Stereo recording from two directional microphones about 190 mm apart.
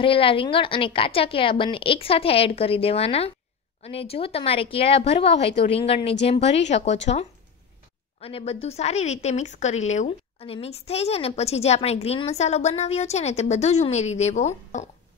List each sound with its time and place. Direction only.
0.0 s a woman's voice: 30° left (ahead or behind)